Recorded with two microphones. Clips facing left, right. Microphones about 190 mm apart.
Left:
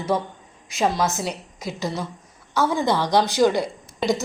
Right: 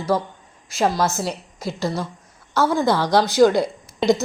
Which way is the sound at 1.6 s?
15° left (ahead or behind).